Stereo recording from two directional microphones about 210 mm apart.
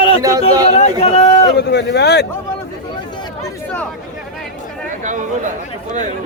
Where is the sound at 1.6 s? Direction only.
50° left (ahead or behind).